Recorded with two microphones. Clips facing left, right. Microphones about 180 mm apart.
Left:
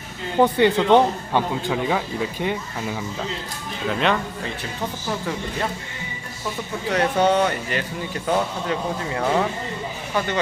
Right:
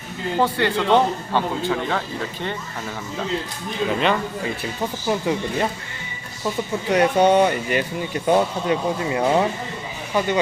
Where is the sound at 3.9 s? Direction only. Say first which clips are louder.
Even; centre (ahead or behind).